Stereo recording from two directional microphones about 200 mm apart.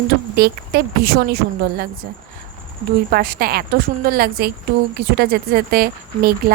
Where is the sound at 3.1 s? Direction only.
50° right (ahead or behind).